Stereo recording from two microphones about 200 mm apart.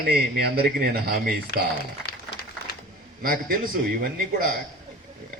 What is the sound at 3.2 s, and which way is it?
Speech, 45° right (ahead or behind).